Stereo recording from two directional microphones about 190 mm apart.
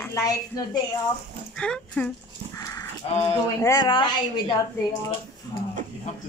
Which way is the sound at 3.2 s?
15° left (ahead or behind).